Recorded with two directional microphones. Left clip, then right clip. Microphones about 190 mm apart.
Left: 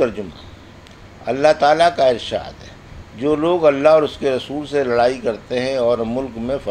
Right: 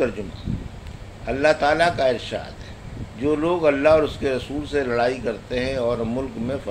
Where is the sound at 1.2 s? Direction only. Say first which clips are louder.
Left 5 dB; 20° left (ahead or behind).